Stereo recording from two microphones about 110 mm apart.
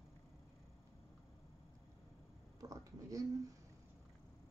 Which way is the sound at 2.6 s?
35° right (ahead or behind).